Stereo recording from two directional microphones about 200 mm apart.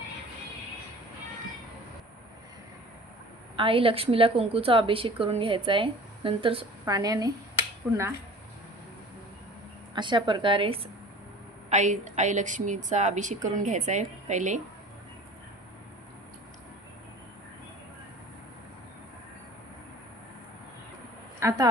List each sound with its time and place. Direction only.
3.5 s a woman's voice: 25° right (ahead or behind); by 8.0 s 10° right (ahead or behind)
9.9 s a woman's voice: 25° right (ahead or behind)
11.7 s a woman's voice: 35° right (ahead or behind)
21.3 s a woman's voice: 15° right (ahead or behind)